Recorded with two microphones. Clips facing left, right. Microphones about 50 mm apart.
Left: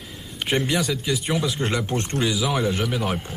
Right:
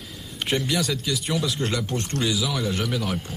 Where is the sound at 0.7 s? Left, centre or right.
Centre.